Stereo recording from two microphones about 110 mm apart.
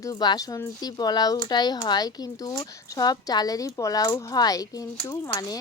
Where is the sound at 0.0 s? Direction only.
35° left (ahead or behind).